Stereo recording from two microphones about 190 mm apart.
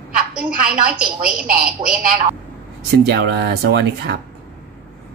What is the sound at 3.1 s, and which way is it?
Speech, 60° right (ahead or behind).